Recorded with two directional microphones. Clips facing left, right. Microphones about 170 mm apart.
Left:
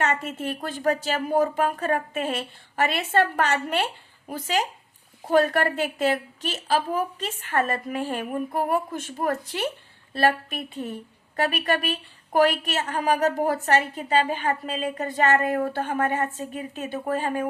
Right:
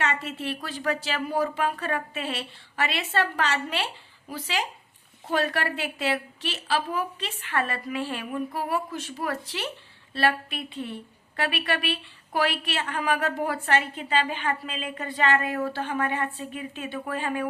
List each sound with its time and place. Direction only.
0.0 s a woman's voice: 45° left (ahead or behind)